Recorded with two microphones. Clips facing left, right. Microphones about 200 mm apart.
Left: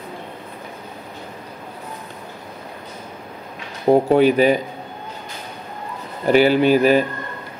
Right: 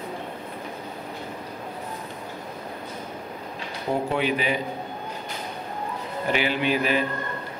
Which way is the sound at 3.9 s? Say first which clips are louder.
Left 11 dB; 40° left (ahead or behind).